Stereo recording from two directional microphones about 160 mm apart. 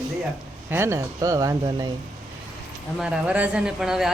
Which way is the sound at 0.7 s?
15° right (ahead or behind).